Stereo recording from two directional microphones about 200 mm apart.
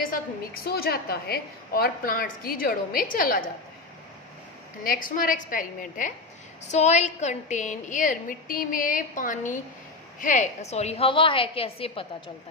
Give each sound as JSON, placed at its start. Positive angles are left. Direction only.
{"t": 0.0, "sound": "a woman's voice", "side_deg": 45}
{"t": 4.8, "sound": "a woman's voice", "side_deg": 45}